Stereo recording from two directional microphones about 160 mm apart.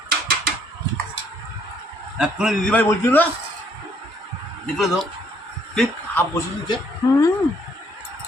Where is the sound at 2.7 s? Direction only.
15° left (ahead or behind).